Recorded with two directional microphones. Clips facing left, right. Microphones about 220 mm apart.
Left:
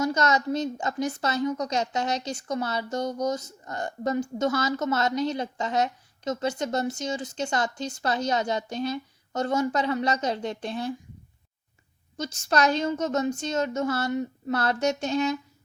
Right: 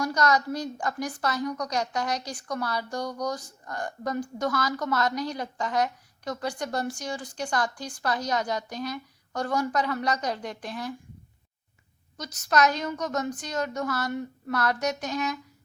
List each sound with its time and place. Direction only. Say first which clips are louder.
0.0 s a woman's voice: left 1 dB; 25° left (ahead or behind)
12.1 s a woman's voice: even; 25° left (ahead or behind)